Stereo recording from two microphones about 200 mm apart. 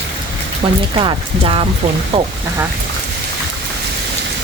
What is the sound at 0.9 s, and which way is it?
Speech, 25° right (ahead or behind).